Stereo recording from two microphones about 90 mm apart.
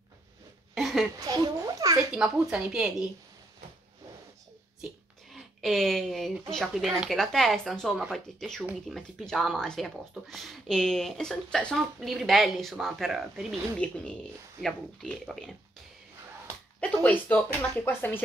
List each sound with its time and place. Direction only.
0.7 s a sound: centre (ahead or behind)
1.2 s speech: 45° right (ahead or behind)
2.1 s a woman's voice: 5° right (ahead or behind)
5.3 s speech: centre (ahead or behind)
13.8 s speech: 15° left (ahead or behind)
16.8 s speech: 15° left (ahead or behind)